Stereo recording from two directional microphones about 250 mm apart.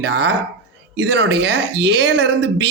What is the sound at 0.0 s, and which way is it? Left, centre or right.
Speech, right.